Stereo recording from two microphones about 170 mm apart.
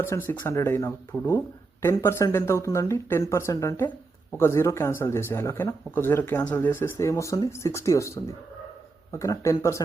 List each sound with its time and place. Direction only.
0.0 s speech: 15° left (ahead or behind)